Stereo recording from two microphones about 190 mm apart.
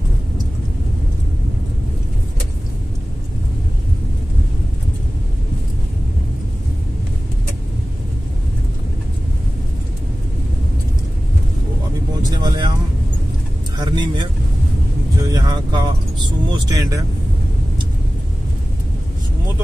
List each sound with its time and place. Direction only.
12.2 s vehicle: 20° right (ahead or behind)
13.7 s vehicle: 25° right (ahead or behind)
15.2 s vehicle: 20° right (ahead or behind)